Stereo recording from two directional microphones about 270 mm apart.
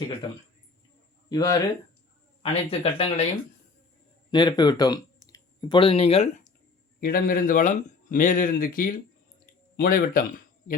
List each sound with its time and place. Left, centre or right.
1.3 s speech: centre
4.3 s speech: centre; by 10.2 s left